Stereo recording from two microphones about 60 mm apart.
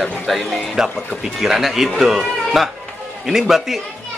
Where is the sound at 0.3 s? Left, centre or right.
Centre.